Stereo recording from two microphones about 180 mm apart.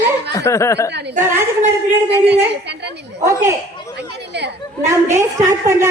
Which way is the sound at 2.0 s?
70° right (ahead or behind).